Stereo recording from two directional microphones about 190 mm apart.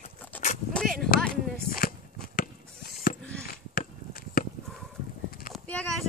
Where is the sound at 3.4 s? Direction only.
50° left (ahead or behind).